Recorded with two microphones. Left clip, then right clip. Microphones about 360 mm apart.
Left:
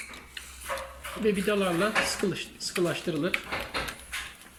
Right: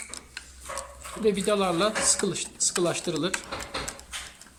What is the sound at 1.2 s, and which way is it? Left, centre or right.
Speech, centre.